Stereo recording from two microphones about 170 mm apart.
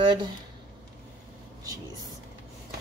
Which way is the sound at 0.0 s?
25° right (ahead or behind).